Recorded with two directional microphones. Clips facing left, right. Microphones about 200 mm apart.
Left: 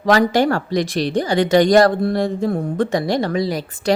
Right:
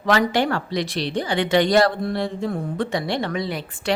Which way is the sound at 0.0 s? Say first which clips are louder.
Left 4 dB; 40° left (ahead or behind).